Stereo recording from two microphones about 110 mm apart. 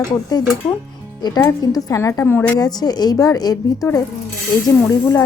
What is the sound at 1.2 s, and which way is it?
Speech, 40° left (ahead or behind).